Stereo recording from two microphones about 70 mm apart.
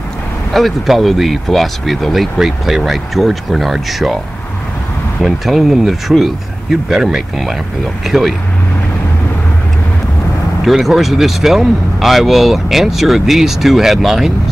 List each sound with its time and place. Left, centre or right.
0.5 s speech: centre
5.2 s speech: centre
10.6 s speech: centre